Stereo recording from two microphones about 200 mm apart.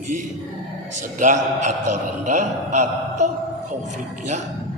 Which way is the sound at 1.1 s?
35° right (ahead or behind).